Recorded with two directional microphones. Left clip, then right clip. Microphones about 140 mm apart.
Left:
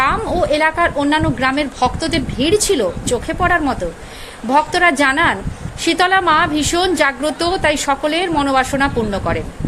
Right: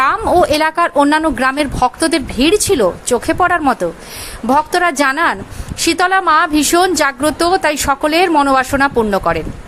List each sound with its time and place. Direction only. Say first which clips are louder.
0.0 s a woman's voice: right 4 dB; 25° right (ahead or behind)